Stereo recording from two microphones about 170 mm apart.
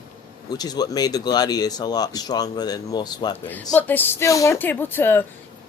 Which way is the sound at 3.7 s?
10° left (ahead or behind).